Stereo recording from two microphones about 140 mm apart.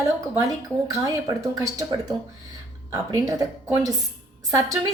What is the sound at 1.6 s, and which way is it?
A woman's voice, 30° right (ahead or behind).